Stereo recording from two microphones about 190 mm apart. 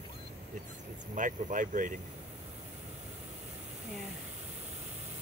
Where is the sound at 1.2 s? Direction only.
45° right (ahead or behind).